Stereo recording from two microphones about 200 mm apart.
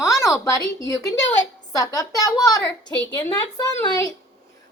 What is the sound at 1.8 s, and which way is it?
Speech, 20° left (ahead or behind).